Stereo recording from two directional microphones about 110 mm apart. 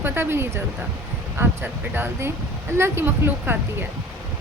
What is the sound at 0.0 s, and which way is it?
A woman's voice, 20° right (ahead or behind).